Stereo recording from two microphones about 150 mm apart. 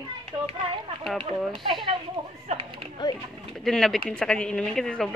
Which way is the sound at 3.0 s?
25° left (ahead or behind).